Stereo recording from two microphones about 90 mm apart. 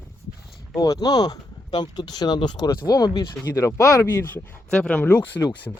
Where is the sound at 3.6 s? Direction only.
30° left (ahead or behind).